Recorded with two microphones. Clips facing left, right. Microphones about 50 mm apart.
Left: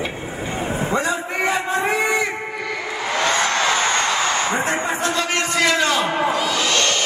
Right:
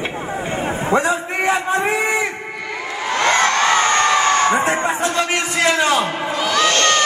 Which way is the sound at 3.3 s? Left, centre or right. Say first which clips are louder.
Right 5 dB; right.